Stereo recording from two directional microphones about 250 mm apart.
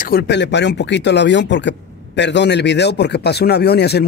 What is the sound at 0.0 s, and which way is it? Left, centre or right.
Speech, left.